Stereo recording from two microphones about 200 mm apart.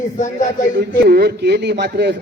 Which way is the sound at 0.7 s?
55° right (ahead or behind).